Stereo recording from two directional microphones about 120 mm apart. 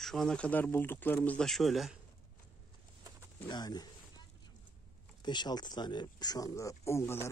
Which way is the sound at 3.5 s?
35° left (ahead or behind).